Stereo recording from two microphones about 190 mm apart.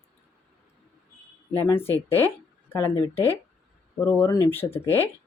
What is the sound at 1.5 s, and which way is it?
Speech, 10° left (ahead or behind).